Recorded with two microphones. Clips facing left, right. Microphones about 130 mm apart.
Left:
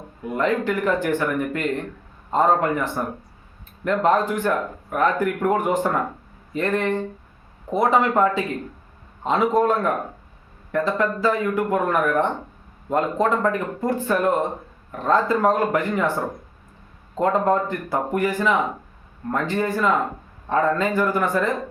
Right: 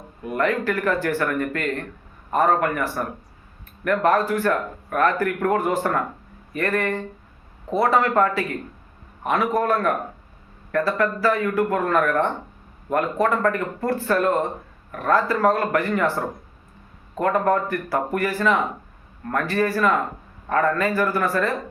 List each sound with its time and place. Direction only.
0.2 s a man's voice: 20° left (ahead or behind)
17.2 s a man's voice: 20° left (ahead or behind)